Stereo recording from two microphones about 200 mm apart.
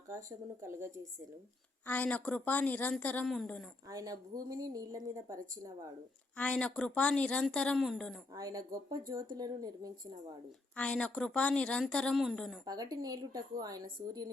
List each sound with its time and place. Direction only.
0.1 s a woman's voice: 15° right (ahead or behind)
1.9 s speech: 5° left (ahead or behind)
3.8 s a woman's voice: 15° right (ahead or behind)
6.3 s a woman's voice: 5° left (ahead or behind)
8.3 s speech: 20° right (ahead or behind)
10.8 s a woman's voice: 5° left (ahead or behind)
12.6 s speech: 20° right (ahead or behind)